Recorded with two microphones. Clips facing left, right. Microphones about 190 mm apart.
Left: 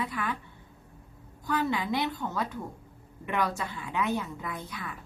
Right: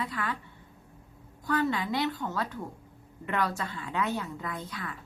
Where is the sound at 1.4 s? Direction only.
10° left (ahead or behind).